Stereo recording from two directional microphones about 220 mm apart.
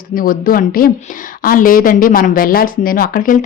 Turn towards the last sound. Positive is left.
turn(degrees=40)  # may be behind; listen again after turning